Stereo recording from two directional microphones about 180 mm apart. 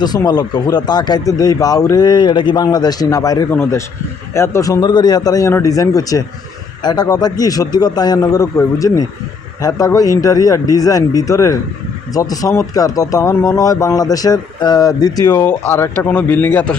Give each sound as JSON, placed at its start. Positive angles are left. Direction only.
{"t": 0.0, "sound": "speech", "side_deg": 20}
{"t": 15.4, "sound": "speech", "side_deg": 10}